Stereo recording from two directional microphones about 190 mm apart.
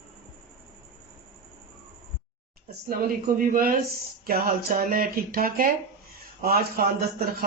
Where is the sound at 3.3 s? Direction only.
50° right (ahead or behind).